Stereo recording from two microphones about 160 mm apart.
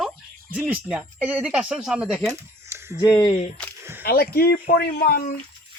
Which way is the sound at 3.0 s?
25° left (ahead or behind).